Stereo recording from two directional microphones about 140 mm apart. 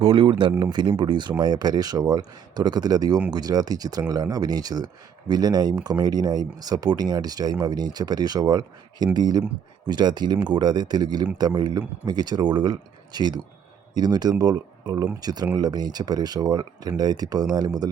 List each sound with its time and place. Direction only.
0.0 s speech: 40° right (ahead or behind)